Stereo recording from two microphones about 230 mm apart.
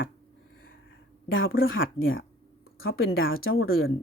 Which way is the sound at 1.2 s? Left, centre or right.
Left.